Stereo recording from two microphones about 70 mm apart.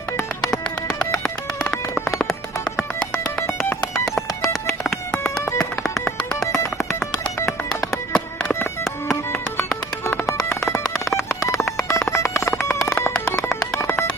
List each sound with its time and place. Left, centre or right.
0.5 s music: centre
3.7 s music: centre
5.2 s music: left
5.8 s music: centre
7.7 s music: centre
10.3 s a sound: centre
12.1 s telephone bell ringing: left
13.1 s music: centre